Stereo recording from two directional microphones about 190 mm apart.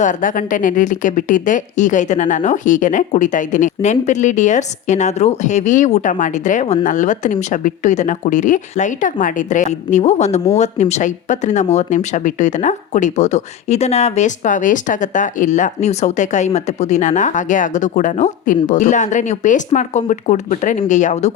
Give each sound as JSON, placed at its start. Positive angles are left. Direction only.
{"t": 0.0, "sound": "speech", "side_deg": 45}